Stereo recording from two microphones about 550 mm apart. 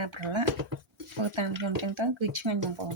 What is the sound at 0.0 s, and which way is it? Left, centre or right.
Speech, right.